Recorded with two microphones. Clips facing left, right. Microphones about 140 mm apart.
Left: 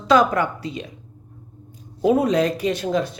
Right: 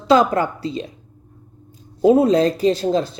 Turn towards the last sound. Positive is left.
turn(degrees=-30)  # may be behind; listen again after turning